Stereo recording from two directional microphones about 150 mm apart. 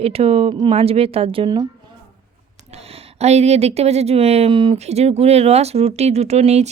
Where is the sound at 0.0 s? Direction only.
40° right (ahead or behind).